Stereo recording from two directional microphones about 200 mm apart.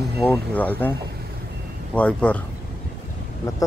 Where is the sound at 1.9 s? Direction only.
5° left (ahead or behind).